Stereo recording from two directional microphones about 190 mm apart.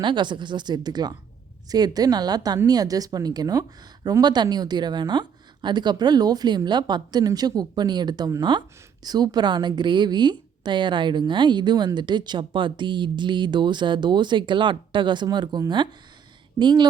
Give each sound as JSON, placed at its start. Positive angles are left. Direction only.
{"t": 0.0, "sound": "a woman's voice", "side_deg": -25}